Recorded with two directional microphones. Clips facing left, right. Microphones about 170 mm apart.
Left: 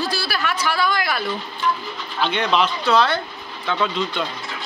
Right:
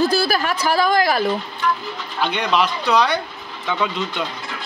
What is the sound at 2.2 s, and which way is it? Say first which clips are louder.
Speech: even; 10° right (ahead or behind).